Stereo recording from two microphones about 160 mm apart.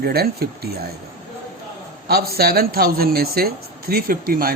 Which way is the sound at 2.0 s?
75° right (ahead or behind).